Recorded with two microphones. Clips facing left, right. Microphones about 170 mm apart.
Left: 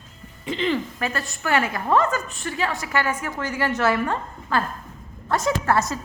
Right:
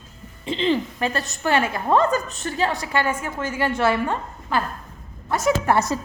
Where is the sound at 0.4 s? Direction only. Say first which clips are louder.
Right 2 dB; 25° right (ahead or behind).